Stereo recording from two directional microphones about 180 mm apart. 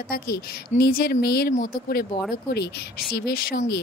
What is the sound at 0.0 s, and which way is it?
Speech, 55° left (ahead or behind).